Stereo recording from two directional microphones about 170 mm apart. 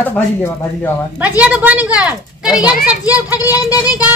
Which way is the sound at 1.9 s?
5° right (ahead or behind).